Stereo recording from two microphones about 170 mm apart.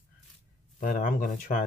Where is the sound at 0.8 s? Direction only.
50° left (ahead or behind).